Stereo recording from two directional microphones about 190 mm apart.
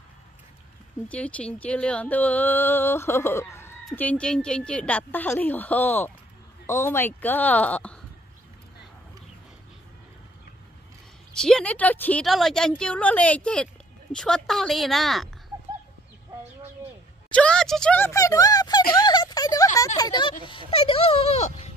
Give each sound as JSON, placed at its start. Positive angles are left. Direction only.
{"t": 1.0, "sound": "speech", "side_deg": 5}
{"t": 11.3, "sound": "a woman's voice", "side_deg": 5}
{"t": 17.3, "sound": "speech", "side_deg": 5}